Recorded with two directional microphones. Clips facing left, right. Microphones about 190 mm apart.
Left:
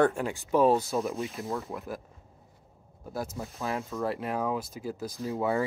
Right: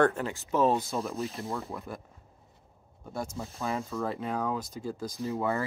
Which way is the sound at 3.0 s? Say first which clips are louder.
Left 1 dB; 5° left (ahead or behind).